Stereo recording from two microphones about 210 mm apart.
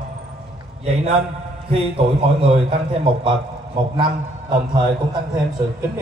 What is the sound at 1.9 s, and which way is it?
Speech, 25° right (ahead or behind).